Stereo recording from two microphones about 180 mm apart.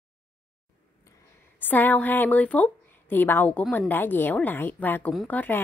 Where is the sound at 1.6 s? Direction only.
10° left (ahead or behind).